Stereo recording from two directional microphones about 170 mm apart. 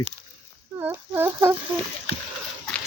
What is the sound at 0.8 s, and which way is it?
Speech, 10° right (ahead or behind).